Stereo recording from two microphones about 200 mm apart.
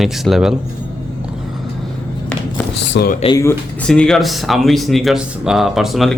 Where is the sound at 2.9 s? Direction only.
50° left (ahead or behind).